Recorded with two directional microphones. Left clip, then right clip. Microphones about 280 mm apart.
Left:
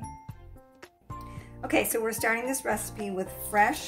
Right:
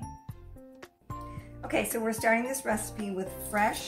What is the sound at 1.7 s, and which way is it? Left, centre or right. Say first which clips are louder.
Speech: left 3 dB; left.